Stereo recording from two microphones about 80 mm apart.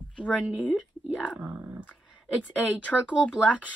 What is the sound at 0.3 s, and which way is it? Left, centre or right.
Speech, centre.